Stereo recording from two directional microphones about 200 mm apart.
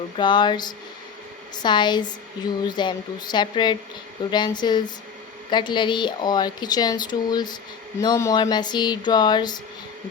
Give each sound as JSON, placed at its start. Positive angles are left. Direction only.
{"t": 0.2, "sound": "a woman's voice", "side_deg": 20}